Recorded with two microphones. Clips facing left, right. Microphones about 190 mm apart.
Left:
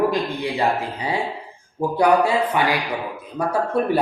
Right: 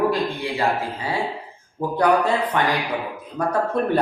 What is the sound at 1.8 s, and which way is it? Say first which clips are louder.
Speech: left 2 dB; 10° left (ahead or behind).